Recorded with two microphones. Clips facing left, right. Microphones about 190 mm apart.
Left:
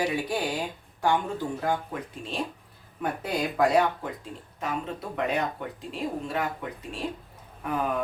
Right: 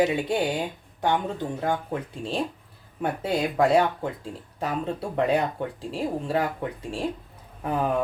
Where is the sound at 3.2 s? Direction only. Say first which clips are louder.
Right 2 dB; 25° right (ahead or behind).